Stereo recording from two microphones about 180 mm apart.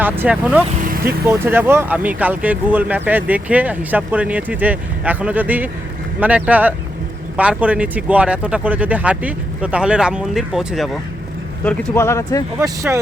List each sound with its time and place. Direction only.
0.0 s speech: 10° right (ahead or behind); by 12.5 s 20° left (ahead or behind)
12.5 s speech: 15° right (ahead or behind)